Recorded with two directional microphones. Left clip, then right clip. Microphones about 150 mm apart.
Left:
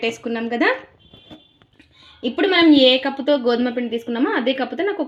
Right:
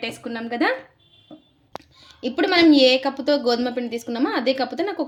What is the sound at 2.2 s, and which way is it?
Speech, 45° left (ahead or behind).